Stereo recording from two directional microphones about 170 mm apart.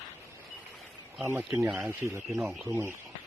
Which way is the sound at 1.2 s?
15° right (ahead or behind).